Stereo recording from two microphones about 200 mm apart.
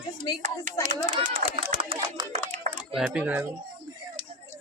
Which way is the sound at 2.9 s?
5° right (ahead or behind).